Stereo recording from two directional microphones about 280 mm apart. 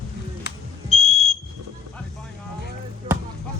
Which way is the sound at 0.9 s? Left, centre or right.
Left.